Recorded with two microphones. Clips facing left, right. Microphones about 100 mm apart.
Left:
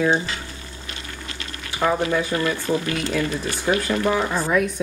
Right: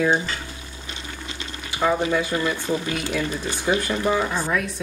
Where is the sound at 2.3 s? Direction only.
5° right (ahead or behind).